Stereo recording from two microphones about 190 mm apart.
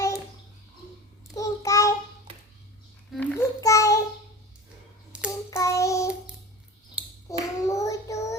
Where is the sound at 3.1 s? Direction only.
5° left (ahead or behind).